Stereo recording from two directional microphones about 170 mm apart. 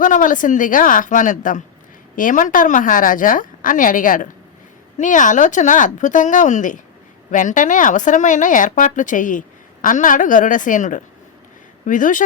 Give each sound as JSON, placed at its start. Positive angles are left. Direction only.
{"t": 0.0, "sound": "speech", "side_deg": 50}